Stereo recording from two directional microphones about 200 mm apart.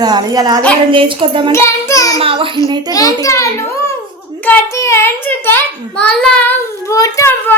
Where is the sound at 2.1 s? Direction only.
25° right (ahead or behind).